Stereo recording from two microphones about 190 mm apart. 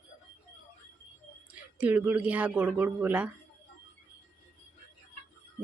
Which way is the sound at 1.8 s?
10° right (ahead or behind).